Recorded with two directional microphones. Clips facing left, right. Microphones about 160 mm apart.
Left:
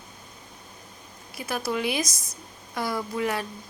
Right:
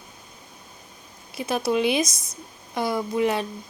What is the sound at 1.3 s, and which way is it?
Speech, 25° right (ahead or behind).